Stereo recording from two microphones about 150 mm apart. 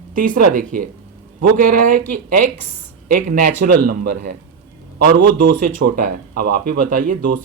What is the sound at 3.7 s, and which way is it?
Speech, 85° right.